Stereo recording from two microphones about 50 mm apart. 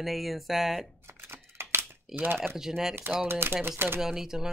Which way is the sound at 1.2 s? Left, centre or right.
Right.